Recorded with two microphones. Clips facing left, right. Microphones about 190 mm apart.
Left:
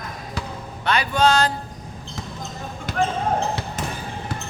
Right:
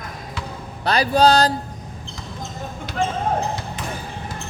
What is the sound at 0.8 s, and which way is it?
Speech, 35° right (ahead or behind).